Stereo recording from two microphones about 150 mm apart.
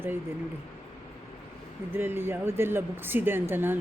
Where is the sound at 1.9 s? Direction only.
15° right (ahead or behind).